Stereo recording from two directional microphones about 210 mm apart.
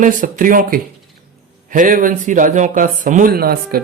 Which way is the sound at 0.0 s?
40° right (ahead or behind).